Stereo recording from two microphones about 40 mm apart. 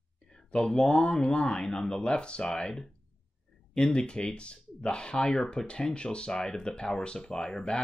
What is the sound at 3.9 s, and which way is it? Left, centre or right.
Speech, left.